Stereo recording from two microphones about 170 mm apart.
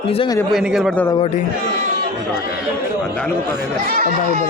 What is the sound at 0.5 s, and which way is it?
Speech, centre (ahead or behind).